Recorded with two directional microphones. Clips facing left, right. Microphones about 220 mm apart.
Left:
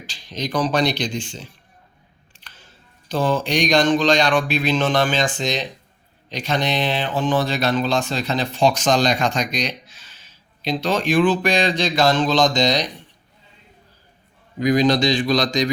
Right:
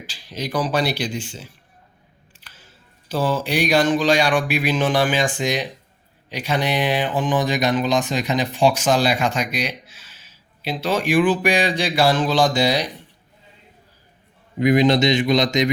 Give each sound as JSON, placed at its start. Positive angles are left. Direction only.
{"t": 0.1, "sound": "speech", "side_deg": -5}
{"t": 14.6, "sound": "speech", "side_deg": -25}